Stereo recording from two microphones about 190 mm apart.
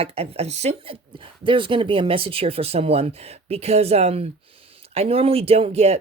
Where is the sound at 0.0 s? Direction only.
30° right (ahead or behind).